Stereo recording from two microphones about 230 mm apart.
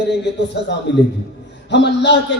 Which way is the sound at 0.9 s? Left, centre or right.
Left.